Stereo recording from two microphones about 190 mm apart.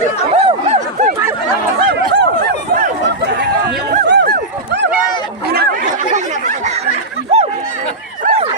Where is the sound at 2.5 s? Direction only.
50° right (ahead or behind).